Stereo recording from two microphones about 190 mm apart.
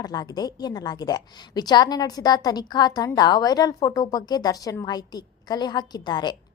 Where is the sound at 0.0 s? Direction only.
20° left (ahead or behind).